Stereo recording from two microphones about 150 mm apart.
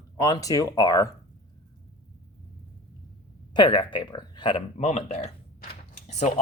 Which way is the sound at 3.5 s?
30° left (ahead or behind).